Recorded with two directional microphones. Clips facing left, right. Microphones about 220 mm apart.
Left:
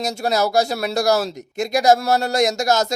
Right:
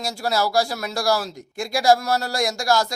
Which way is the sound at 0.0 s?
20° left (ahead or behind).